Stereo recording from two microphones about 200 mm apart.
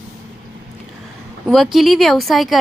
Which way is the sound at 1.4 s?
Centre (ahead or behind).